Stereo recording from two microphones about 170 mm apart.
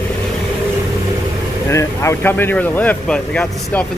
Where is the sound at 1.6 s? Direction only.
15° left (ahead or behind).